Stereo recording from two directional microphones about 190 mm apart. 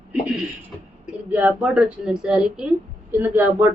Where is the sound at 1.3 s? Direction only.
10° right (ahead or behind).